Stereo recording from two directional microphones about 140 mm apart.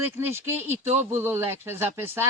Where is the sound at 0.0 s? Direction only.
15° right (ahead or behind).